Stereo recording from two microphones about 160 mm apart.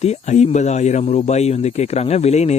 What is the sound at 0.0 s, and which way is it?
Speech, 45° left (ahead or behind).